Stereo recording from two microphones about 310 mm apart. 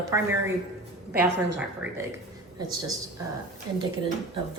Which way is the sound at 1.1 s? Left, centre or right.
Right.